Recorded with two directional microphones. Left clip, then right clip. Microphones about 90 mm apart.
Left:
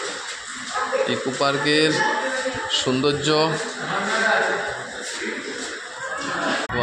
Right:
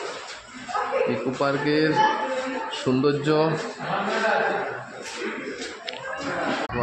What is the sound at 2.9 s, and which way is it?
Speech, 40° right (ahead or behind).